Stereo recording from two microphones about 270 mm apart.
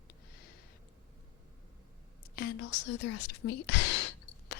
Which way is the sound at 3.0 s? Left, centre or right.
Left.